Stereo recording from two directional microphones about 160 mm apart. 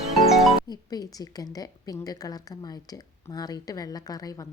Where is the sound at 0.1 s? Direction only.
Centre (ahead or behind).